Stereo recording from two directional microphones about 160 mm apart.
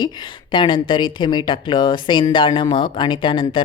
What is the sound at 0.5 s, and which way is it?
Speech, 30° left (ahead or behind).